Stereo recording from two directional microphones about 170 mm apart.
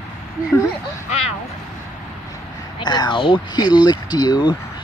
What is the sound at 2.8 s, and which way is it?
Speech, 25° left (ahead or behind).